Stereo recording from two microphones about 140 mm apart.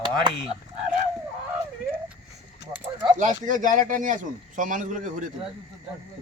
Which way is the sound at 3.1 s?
65° right (ahead or behind).